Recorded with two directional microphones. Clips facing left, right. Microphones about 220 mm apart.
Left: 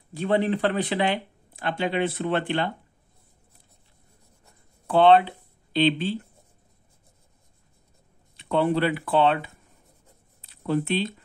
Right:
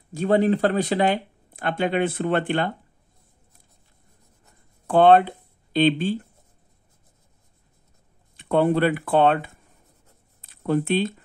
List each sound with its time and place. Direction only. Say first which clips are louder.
0.1 s speech: right 4 dB; 40° right (ahead or behind)
4.8 s speech: right 2 dB; 45° right (ahead or behind)
8.4 s speech: right 3 dB; 50° right (ahead or behind)